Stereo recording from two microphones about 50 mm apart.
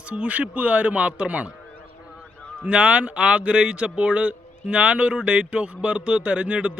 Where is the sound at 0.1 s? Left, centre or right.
Right.